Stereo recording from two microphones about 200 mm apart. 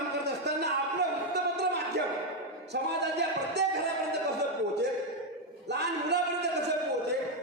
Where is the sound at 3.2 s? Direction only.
55° right (ahead or behind).